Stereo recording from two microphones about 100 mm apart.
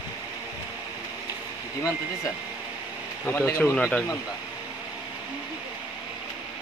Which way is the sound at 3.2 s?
25° left (ahead or behind).